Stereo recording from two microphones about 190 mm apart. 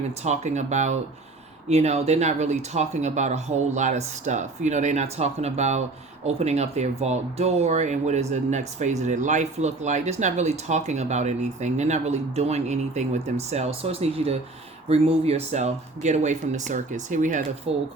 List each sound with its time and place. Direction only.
0.2 s speech: 35° right (ahead or behind)